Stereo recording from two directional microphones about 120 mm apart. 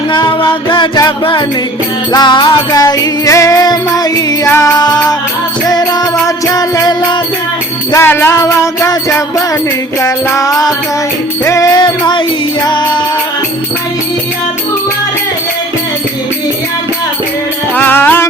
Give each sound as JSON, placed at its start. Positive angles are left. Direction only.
{"t": 0.1, "sound": "music", "side_deg": 40}
{"t": 4.4, "sound": "music", "side_deg": 20}
{"t": 4.8, "sound": "music", "side_deg": 35}
{"t": 7.9, "sound": "music", "side_deg": 20}
{"t": 11.8, "sound": "music", "side_deg": 40}
{"t": 17.7, "sound": "music", "side_deg": 15}